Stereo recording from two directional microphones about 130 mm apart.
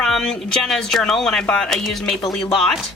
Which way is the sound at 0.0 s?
5° left (ahead or behind).